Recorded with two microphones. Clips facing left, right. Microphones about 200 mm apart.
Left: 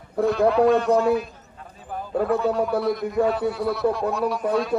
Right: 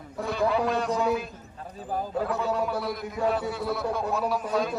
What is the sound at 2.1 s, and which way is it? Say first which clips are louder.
Speech: left 9 dB; 55° left (ahead or behind).